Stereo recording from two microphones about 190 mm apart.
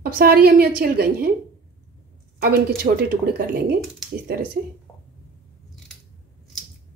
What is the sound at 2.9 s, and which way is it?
Speech, 55° right (ahead or behind).